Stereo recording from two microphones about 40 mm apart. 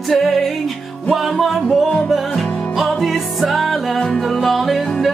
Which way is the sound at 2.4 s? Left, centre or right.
Left.